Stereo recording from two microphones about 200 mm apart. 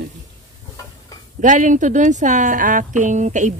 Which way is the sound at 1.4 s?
40° right (ahead or behind).